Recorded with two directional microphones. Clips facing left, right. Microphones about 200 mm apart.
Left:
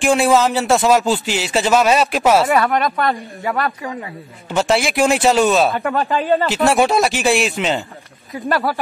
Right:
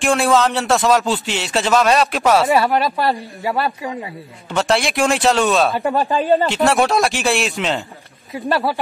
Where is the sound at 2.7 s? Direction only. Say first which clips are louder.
Even; 30° right (ahead or behind).